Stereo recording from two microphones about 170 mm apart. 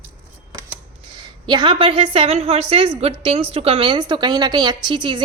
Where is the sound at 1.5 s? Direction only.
30° right (ahead or behind).